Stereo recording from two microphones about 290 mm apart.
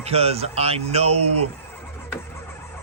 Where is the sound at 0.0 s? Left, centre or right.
Right.